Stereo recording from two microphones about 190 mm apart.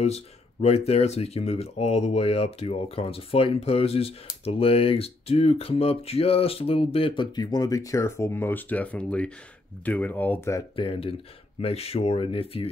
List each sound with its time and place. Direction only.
0.0 s speech: 35° left (ahead or behind); by 10.6 s 10° left (ahead or behind)
10.8 s speech: 30° left (ahead or behind)